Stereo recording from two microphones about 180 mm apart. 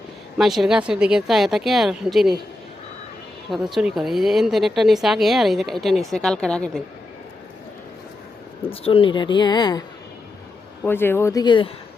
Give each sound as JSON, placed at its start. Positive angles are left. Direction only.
{"t": 0.3, "sound": "a woman's voice", "side_deg": 0}
{"t": 3.5, "sound": "a woman's voice", "side_deg": 0}
{"t": 8.6, "sound": "speech", "side_deg": 30}
{"t": 10.8, "sound": "speech", "side_deg": 10}